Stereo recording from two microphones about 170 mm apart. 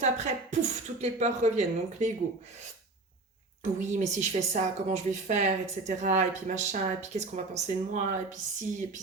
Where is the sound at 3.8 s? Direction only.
45° right (ahead or behind).